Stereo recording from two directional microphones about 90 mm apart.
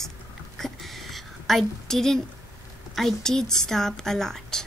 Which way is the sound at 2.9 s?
5° left (ahead or behind).